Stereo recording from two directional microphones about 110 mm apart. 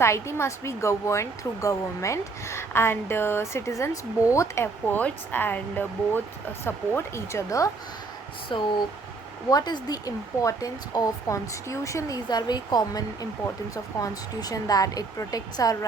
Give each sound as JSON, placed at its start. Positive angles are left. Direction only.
{"t": 0.0, "sound": "speech", "side_deg": 25}
{"t": 8.5, "sound": "speech", "side_deg": 45}